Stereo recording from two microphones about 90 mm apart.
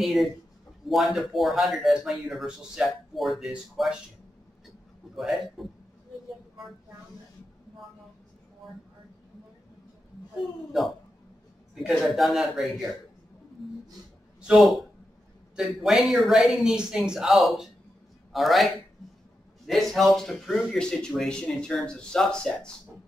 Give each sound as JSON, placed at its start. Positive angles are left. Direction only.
{"t": 0.0, "sound": "speech", "side_deg": 0}
{"t": 5.1, "sound": "speech", "side_deg": 0}
{"t": 10.8, "sound": "speech", "side_deg": -5}
{"t": 12.0, "sound": "speech", "side_deg": 0}
{"t": 14.4, "sound": "a man's voice", "side_deg": 0}